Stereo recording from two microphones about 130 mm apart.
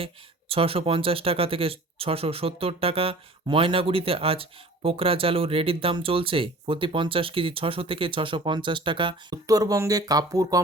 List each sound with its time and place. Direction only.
0.0 s speech: 45° right (ahead or behind)
9.3 s speech: 25° right (ahead or behind)